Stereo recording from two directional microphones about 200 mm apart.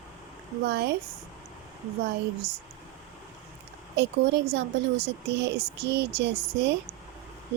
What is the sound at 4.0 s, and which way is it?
Speech, 55° right (ahead or behind).